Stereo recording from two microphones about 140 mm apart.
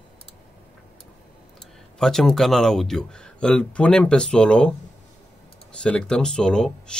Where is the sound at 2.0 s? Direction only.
5° left (ahead or behind).